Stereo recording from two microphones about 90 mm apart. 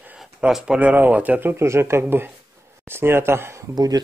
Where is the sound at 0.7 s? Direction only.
15° right (ahead or behind).